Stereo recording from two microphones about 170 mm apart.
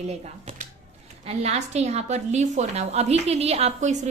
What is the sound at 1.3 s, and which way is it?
A woman's voice, 40° right (ahead or behind).